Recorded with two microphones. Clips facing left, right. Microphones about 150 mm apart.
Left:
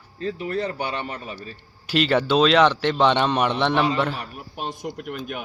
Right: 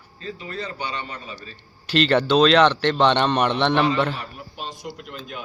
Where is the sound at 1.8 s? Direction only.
5° left (ahead or behind).